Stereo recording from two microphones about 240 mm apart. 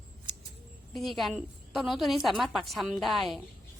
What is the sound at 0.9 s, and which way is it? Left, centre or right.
A woman's voice, centre.